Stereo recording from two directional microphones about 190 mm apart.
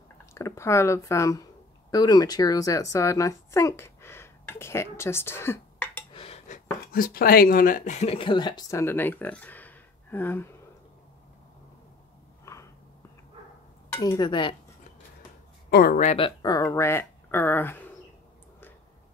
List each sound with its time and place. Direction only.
0.3 s a woman's voice: 15° left (ahead or behind)
6.1 s speech: 35° left (ahead or behind); by 10.5 s 10° left (ahead or behind)
13.9 s speech: 20° left (ahead or behind)
15.7 s speech: 50° left (ahead or behind)
16.1 s speech: 25° left (ahead or behind); by 17.8 s 10° left (ahead or behind)